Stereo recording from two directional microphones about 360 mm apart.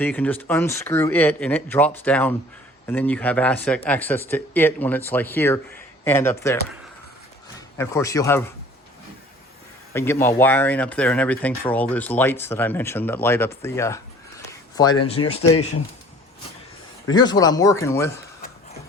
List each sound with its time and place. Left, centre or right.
0.0 s speech: centre
7.8 s speech: centre
9.9 s speech: centre
15.2 s speech: left
17.1 s speech: centre